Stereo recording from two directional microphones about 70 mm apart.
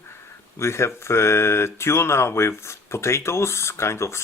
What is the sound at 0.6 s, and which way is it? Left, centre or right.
Speech, left.